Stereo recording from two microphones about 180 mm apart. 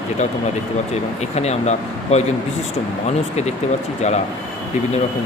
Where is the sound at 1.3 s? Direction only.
35° left (ahead or behind).